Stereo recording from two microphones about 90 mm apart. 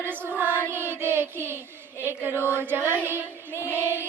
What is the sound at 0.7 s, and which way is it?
Child singing, 25° right (ahead or behind).